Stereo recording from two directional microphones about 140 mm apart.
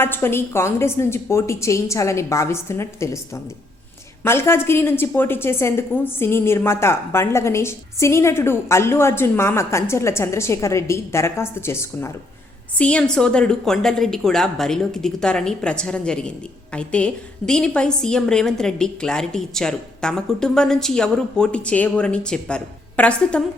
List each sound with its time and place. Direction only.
0.0 s a woman's voice: 15° left (ahead or behind)
4.2 s a woman's voice: 15° left (ahead or behind)
12.8 s a woman's voice: 5° left (ahead or behind)